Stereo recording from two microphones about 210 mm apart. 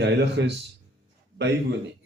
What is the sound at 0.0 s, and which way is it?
Speech, 55° right (ahead or behind).